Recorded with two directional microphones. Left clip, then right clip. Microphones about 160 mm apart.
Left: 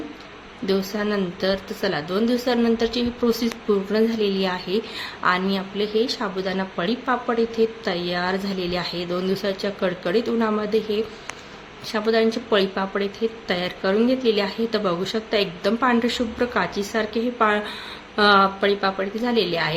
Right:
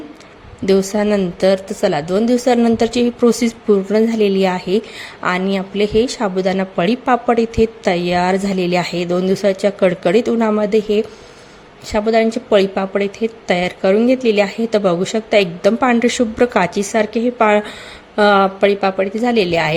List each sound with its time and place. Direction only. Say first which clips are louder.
0.6 s speech: right 9 dB; 50° right (ahead or behind)